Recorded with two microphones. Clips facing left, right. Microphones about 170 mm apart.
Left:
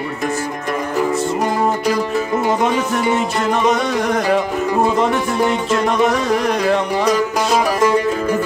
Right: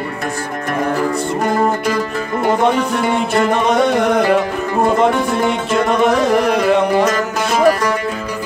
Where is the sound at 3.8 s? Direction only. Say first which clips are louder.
Right 5 dB; 60° right (ahead or behind).